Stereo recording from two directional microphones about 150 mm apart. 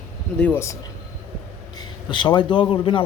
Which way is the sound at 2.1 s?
30° left (ahead or behind).